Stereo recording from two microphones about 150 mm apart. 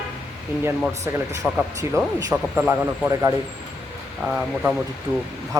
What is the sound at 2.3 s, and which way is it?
Speech, 10° right (ahead or behind).